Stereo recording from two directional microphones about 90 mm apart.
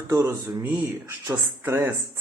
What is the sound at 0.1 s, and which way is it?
Speech, 30° right (ahead or behind).